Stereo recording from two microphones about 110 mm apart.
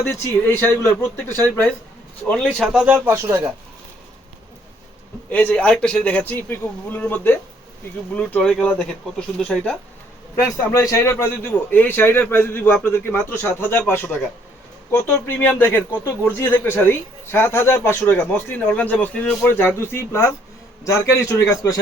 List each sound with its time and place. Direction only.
0.2 s a man's voice: 20° left (ahead or behind)
2.7 s speech: 15° right (ahead or behind)
5.3 s a man's voice: 15° left (ahead or behind)
10.7 s a man's voice: 30° left (ahead or behind)